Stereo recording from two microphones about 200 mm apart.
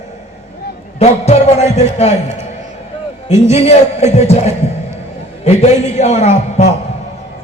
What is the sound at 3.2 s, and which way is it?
A man's voice, 30° left (ahead or behind).